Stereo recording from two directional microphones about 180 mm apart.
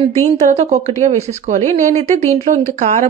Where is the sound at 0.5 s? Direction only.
35° right (ahead or behind).